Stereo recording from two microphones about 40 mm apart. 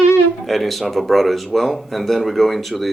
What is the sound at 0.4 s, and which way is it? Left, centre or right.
Speech, centre.